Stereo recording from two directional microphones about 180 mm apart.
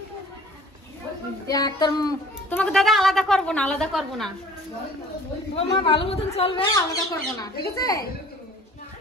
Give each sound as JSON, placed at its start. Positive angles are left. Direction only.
{"t": 1.5, "sound": "child singing", "side_deg": 20}
{"t": 2.5, "sound": "a woman's voice", "side_deg": 5}
{"t": 5.6, "sound": "a woman's voice", "side_deg": 30}
{"t": 6.6, "sound": "speech", "side_deg": 20}